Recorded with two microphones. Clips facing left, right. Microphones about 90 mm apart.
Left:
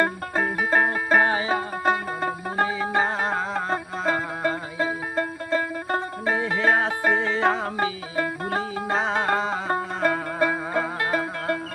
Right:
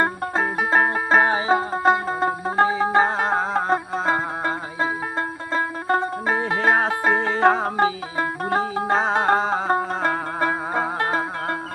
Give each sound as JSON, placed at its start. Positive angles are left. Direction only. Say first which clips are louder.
{"t": 0.0, "sound": "music", "louder": "right 2 dB", "side_deg": -30}